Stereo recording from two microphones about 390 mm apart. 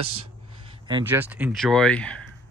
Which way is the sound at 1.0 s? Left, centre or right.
Centre.